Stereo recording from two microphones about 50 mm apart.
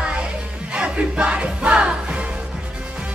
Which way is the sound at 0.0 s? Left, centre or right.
Right.